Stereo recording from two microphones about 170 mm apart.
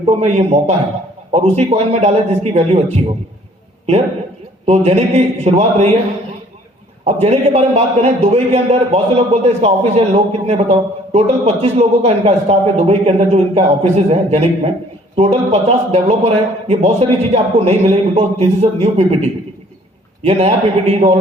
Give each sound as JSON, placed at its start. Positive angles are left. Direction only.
{"t": 0.0, "sound": "a man's voice", "side_deg": -40}
{"t": 4.6, "sound": "a man's voice", "side_deg": -40}
{"t": 7.0, "sound": "a man's voice", "side_deg": -40}
{"t": 20.2, "sound": "a man's voice", "side_deg": -40}